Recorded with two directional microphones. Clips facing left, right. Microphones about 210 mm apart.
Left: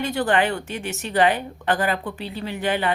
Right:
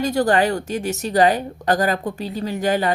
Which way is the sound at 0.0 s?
40° right (ahead or behind).